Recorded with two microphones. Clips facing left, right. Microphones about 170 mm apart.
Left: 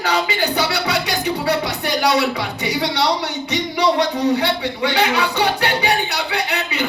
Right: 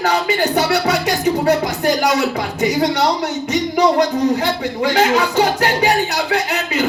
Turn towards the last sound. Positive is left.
turn(degrees=65)  # may be behind; listen again after turning